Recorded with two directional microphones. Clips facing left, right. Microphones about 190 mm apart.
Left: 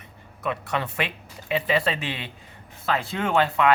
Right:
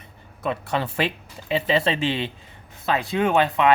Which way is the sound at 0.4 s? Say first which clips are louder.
Right 2 dB; 30° right (ahead or behind).